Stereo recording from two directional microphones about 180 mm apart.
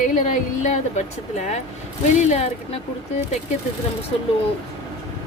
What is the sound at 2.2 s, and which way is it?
Speech, 40° left (ahead or behind).